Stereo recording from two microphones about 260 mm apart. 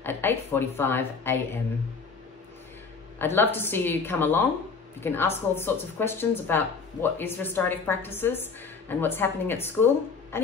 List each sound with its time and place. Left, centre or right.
0.0 s a woman's voice: centre
3.2 s a woman's voice: centre
10.3 s music: centre